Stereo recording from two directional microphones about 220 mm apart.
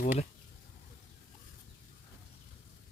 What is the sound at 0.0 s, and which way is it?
Speech, 35° left (ahead or behind).